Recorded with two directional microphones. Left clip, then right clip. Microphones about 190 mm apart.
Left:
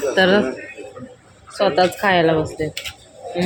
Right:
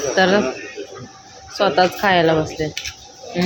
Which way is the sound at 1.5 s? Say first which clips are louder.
Right 1 dB; centre (ahead or behind).